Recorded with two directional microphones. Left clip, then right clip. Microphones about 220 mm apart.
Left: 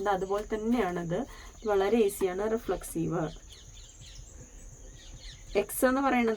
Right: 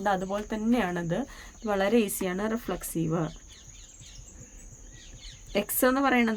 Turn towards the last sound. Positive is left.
turn(degrees=-50)  # may be behind; listen again after turning